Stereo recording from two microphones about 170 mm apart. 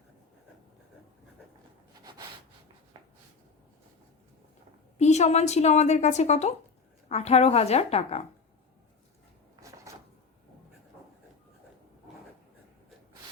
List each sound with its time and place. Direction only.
4.9 s a woman's voice: 40° left (ahead or behind)
9.6 s cupboard open or close: 20° right (ahead or behind)